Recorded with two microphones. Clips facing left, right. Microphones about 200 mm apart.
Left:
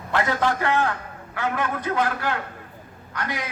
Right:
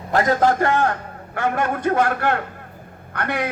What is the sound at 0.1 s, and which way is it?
A man's voice, 40° right (ahead or behind).